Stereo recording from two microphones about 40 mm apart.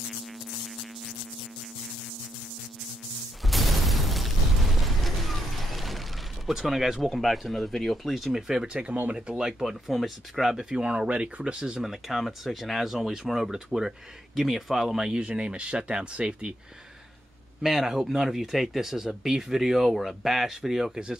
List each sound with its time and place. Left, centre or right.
3.4 s a sound: centre
6.5 s speech: centre
8.9 s speech: right
9.4 s speech: centre
10.4 s speech: centre; by 11.5 s right
11.8 s speech: centre
15.1 s speech: right
17.6 s speech: centre